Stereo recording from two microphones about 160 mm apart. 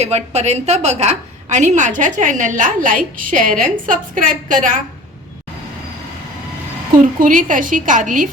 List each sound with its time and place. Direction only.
0.0 s a woman's voice: 45° right (ahead or behind)
7.2 s a woman's voice: 55° right (ahead or behind)